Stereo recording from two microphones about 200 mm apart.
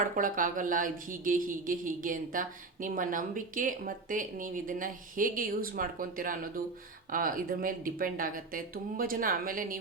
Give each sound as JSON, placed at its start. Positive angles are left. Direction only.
{"t": 0.2, "sound": "speech", "side_deg": -40}